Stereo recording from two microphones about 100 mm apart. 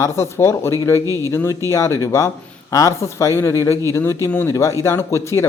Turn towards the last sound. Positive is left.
turn(degrees=30)  # may be behind; listen again after turning